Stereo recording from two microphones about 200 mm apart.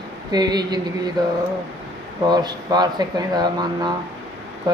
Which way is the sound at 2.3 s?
20° right (ahead or behind).